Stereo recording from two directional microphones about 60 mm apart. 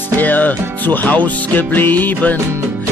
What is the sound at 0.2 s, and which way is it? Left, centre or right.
Music, left.